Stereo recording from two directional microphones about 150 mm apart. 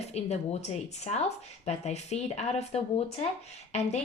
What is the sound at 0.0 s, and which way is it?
Speech, 45° left (ahead or behind).